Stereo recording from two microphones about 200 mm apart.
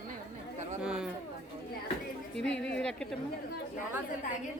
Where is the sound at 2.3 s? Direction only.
5° left (ahead or behind).